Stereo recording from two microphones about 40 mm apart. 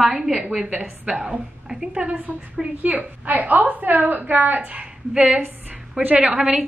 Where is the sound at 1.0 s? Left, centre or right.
Right.